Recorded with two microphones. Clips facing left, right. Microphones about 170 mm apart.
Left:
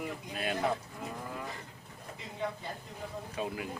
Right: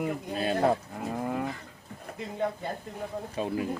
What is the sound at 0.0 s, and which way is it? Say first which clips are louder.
Speech: right 8 dB; 55° right (ahead or behind).